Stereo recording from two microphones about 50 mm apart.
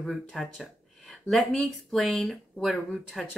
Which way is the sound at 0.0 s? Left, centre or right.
Centre.